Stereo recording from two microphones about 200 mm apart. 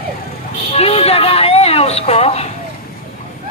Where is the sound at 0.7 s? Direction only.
30° left (ahead or behind).